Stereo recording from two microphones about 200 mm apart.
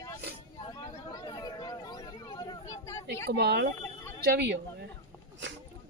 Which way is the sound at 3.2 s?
55° right (ahead or behind).